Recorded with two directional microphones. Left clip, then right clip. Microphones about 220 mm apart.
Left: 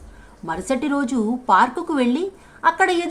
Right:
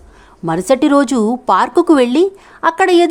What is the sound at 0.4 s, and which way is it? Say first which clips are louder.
Speech: right 10 dB; 50° right (ahead or behind).